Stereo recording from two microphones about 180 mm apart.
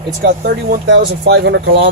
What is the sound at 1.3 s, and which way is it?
Speech, 75° right (ahead or behind).